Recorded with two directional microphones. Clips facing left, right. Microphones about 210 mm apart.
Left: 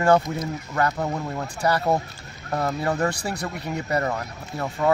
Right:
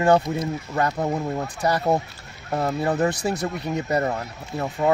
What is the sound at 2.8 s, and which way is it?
Speech, 20° right (ahead or behind).